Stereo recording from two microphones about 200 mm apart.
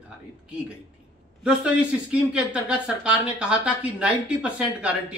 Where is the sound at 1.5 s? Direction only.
5° right (ahead or behind).